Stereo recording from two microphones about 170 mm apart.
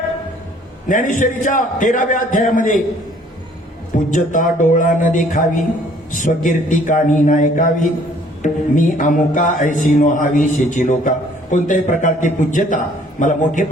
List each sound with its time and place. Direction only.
0.9 s speech: 50° left (ahead or behind)
4.1 s speech: 50° left (ahead or behind)